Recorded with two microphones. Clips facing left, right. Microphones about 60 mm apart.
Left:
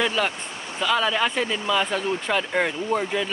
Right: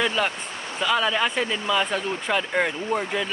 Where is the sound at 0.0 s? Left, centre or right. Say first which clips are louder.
Even; centre.